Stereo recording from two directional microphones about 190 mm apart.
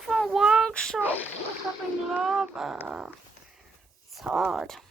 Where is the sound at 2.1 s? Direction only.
Centre (ahead or behind).